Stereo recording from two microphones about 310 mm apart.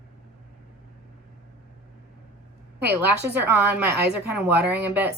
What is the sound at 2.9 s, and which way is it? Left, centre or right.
A woman's voice, centre.